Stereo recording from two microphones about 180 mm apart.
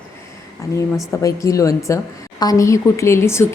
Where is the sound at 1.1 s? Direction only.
15° left (ahead or behind).